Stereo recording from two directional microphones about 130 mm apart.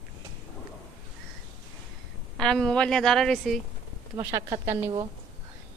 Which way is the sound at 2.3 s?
5° left (ahead or behind).